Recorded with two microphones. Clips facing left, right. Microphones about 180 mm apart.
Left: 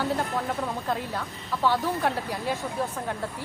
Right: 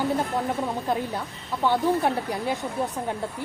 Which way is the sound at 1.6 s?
20° right (ahead or behind).